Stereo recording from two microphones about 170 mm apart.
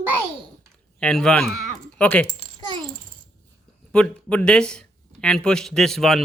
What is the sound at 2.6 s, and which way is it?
Babbling, 25° right (ahead or behind).